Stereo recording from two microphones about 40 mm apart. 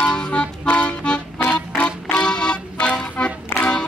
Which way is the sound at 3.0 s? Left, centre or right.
Left.